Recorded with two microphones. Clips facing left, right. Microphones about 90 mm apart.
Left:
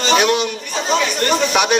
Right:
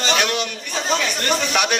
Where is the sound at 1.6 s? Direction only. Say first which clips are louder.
Left 3 dB; 10° left (ahead or behind).